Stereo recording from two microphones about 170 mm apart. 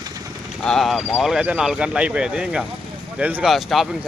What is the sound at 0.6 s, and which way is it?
Speech, centre (ahead or behind).